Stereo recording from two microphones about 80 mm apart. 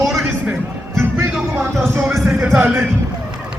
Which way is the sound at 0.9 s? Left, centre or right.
Right.